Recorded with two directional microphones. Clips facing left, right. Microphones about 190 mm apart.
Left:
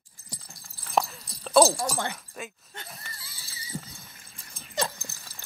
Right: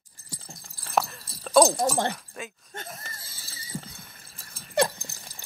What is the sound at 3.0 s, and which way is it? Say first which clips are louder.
Horse: right 2 dB; 45° right (ahead or behind).